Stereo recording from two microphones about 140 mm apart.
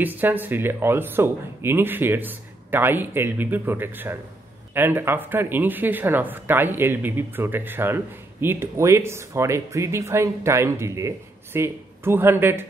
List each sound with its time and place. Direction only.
0.0 s speech: 15° right (ahead or behind)